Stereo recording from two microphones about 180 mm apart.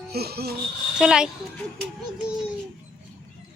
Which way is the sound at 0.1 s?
60° right (ahead or behind).